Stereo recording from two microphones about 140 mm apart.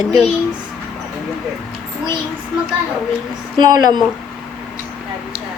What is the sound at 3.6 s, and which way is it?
Speech, 30° right (ahead or behind).